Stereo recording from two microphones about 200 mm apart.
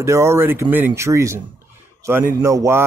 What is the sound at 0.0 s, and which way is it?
Speech, 15° right (ahead or behind).